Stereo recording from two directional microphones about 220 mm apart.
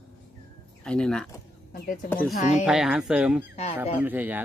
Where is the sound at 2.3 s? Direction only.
35° left (ahead or behind).